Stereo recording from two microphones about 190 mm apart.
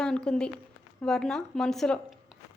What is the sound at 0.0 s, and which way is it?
Speech, 5° left (ahead or behind).